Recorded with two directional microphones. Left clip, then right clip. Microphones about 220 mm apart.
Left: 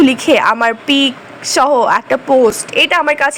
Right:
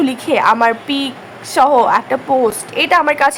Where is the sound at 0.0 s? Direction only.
15° left (ahead or behind).